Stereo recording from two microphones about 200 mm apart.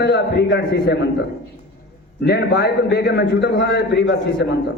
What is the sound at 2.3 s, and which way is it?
A man's voice, 55° left (ahead or behind).